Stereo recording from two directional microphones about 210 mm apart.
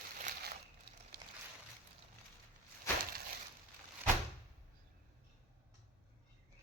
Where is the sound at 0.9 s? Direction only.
50° right (ahead or behind).